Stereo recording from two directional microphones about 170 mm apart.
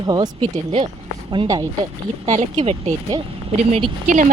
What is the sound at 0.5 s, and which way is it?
Speech, 35° right (ahead or behind).